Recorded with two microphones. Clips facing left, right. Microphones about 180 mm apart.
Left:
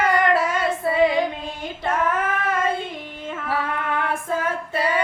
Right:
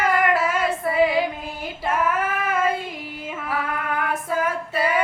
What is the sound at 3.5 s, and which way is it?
Female singing, 25° left (ahead or behind).